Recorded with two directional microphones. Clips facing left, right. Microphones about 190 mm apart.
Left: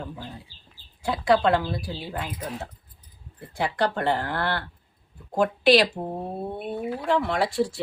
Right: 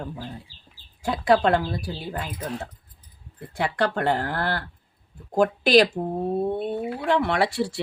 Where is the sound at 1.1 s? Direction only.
45° right (ahead or behind).